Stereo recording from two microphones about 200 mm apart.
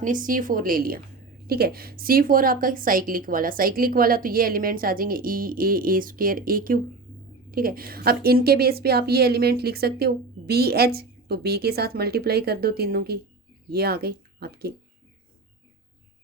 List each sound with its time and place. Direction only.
0.0 s a woman's voice: 40° right (ahead or behind)